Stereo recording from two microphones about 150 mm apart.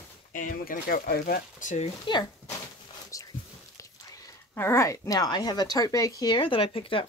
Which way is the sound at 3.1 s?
20° left (ahead or behind).